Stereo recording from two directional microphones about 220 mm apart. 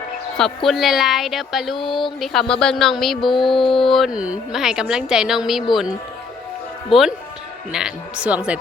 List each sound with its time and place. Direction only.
0.3 s a woman's voice: centre (ahead or behind)
1.8 s speech: 20° left (ahead or behind)
2.2 s a woman's voice: centre (ahead or behind)
6.9 s a woman's voice: centre (ahead or behind)